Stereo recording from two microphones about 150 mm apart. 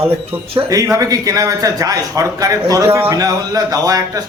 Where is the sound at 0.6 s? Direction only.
20° right (ahead or behind).